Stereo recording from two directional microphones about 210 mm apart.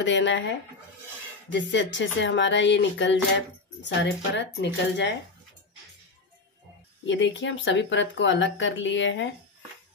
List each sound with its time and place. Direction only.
0.0 s speech: 60° left (ahead or behind)
7.1 s speech: 60° left (ahead or behind)